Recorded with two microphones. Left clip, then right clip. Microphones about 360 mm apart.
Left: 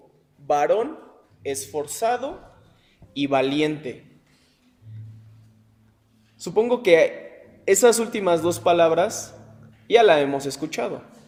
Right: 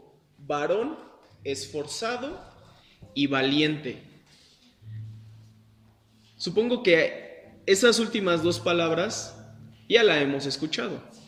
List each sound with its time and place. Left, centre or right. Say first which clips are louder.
0.4 s speech: left 6 dB; left
6.4 s speech: left 4 dB; centre